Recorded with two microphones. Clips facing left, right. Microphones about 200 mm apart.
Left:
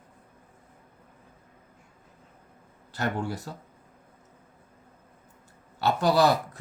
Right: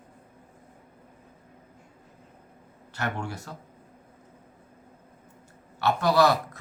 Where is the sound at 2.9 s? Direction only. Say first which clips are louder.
Left 3 dB; 35° left (ahead or behind).